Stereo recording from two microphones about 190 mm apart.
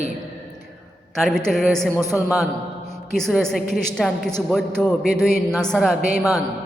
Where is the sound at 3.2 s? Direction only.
Centre (ahead or behind).